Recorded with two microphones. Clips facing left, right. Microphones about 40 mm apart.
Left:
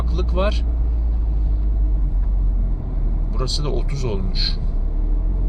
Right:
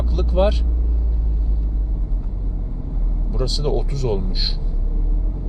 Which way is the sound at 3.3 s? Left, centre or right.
Centre.